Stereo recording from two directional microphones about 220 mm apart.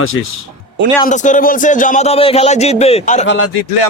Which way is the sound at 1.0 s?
35° left (ahead or behind).